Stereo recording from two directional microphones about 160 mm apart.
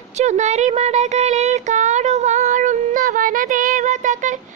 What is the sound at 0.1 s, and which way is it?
Child singing, 45° right (ahead or behind).